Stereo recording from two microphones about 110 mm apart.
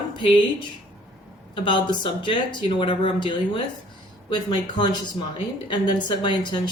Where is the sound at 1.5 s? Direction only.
45° left (ahead or behind).